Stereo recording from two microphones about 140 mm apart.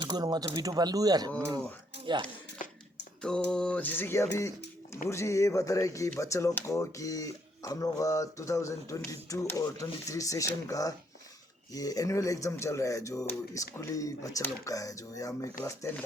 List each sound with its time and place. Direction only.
0.1 s speech: 30° right (ahead or behind)
2.6 s a sound: 70° left (ahead or behind)
3.2 s speech: 5° left (ahead or behind); by 16.0 s 20° left (ahead or behind)